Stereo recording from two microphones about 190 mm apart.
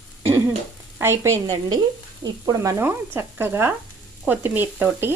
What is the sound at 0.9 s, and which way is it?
Speech, 15° right (ahead or behind).